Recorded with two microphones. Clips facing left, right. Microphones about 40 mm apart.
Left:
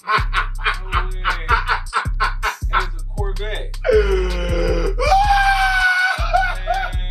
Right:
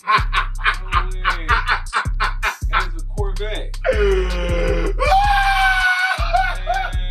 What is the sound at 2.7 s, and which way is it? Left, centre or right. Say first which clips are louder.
Music: even; centre.